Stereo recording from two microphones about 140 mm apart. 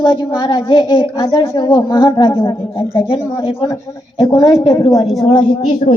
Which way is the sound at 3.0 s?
40° left (ahead or behind).